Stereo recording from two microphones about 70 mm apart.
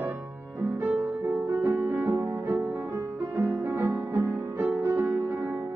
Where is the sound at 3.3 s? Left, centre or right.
Right.